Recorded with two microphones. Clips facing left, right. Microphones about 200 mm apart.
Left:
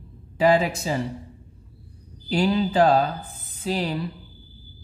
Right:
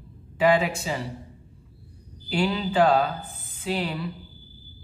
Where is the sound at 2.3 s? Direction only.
40° left (ahead or behind).